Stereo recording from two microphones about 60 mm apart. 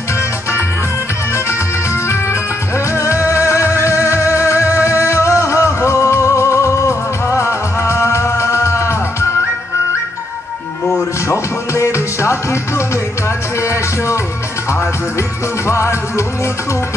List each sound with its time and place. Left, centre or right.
2.9 s music: left
11.2 s music: left
15.6 s music: left